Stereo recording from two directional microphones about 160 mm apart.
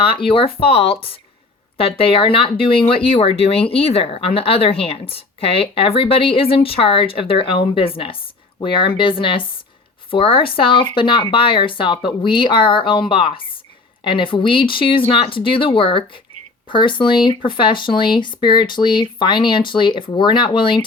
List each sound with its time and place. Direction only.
0.0 s speech: 35° left (ahead or behind)